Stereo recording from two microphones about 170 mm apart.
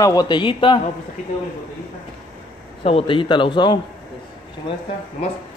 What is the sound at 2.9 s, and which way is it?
Speech, 30° left (ahead or behind).